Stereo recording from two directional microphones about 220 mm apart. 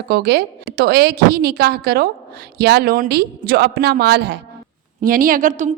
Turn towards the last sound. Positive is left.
turn(degrees=-35)  # may be behind; listen again after turning